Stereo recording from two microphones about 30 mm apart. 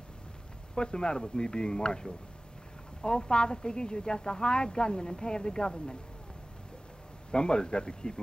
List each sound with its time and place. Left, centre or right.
0.7 s speech: left
7.2 s speech: left